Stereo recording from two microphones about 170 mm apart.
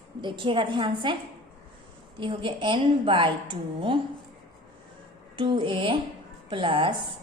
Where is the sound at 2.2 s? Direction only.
30° right (ahead or behind).